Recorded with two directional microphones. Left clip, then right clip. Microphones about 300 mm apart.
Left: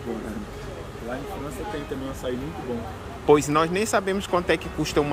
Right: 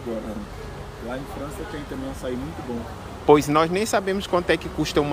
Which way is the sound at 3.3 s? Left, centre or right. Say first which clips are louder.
Right 2 dB; centre.